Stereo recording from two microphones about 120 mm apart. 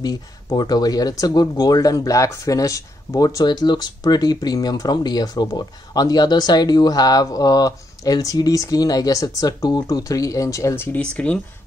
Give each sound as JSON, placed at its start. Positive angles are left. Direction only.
{"t": 0.0, "sound": "speech", "side_deg": 35}
{"t": 11.0, "sound": "speech", "side_deg": 10}